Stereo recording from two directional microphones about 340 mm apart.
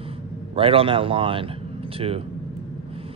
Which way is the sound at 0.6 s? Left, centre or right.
Centre.